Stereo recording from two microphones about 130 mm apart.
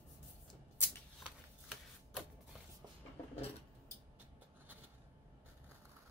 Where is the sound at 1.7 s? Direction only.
5° right (ahead or behind).